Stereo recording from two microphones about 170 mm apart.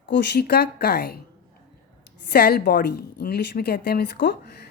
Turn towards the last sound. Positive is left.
turn(degrees=85)